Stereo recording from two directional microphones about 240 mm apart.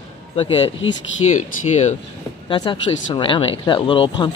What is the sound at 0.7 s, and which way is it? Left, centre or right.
Speech, left.